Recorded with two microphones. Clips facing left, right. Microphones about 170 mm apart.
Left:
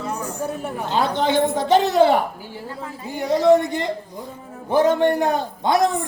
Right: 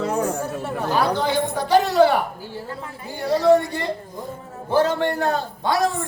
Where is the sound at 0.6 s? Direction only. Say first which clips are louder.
Right 1 dB; 20° left (ahead or behind).